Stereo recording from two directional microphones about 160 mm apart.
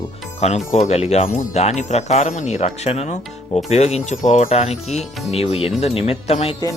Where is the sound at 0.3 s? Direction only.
45° left (ahead or behind).